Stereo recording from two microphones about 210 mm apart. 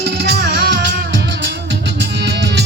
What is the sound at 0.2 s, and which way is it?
Music, 55° right (ahead or behind).